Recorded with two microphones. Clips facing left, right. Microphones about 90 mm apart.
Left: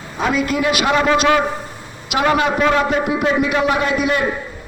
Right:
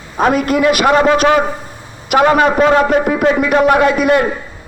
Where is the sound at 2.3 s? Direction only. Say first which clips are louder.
Right 5 dB; 45° right (ahead or behind).